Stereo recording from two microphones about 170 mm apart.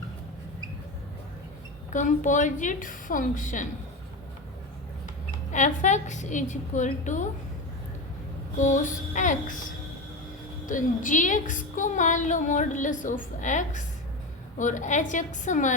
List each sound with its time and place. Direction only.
1.9 s a woman's voice: 50° left (ahead or behind)
5.5 s a woman's voice: 45° left (ahead or behind)
8.5 s a woman's voice: 50° left (ahead or behind)
10.7 s a woman's voice: 50° left (ahead or behind)